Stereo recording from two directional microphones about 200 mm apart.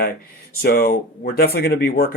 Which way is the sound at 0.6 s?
50° left (ahead or behind).